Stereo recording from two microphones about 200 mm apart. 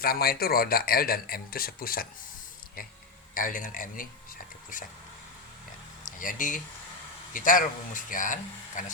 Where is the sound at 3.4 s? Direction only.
45° left (ahead or behind).